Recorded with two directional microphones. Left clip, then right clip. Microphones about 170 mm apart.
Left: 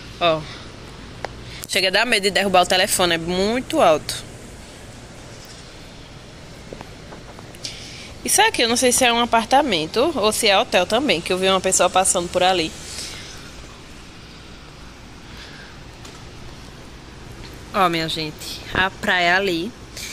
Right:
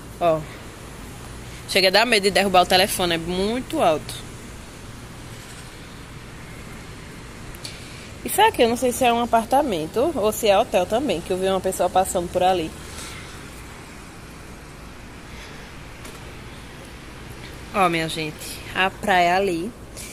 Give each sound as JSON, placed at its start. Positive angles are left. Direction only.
{"t": 0.2, "sound": "speech", "side_deg": -20}
{"t": 1.7, "sound": "speech", "side_deg": 0}
{"t": 8.2, "sound": "speech", "side_deg": 0}
{"t": 17.7, "sound": "speech", "side_deg": 0}